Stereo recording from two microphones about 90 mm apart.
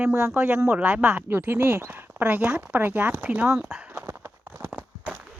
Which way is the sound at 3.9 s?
25° right (ahead or behind).